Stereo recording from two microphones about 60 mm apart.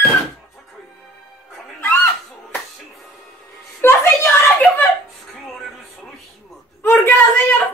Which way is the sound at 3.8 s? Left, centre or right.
Left.